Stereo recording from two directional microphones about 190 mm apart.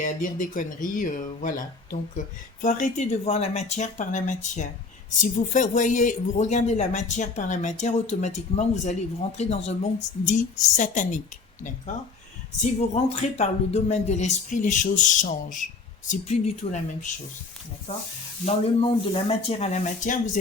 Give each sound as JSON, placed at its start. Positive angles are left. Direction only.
{"t": 0.2, "sound": "speech", "side_deg": 45}
{"t": 12.9, "sound": "speech", "side_deg": 35}
{"t": 17.9, "sound": "speech", "side_deg": 25}